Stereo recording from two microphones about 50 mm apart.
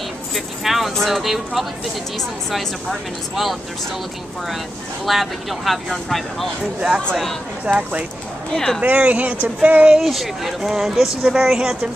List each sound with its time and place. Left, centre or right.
0.3 s speech: centre
5.0 s speech: centre
7.6 s speech: right
8.5 s speech: centre
8.8 s speech: right
9.9 s speech: centre